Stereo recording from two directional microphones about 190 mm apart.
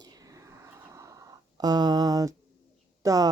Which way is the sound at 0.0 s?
20° right (ahead or behind).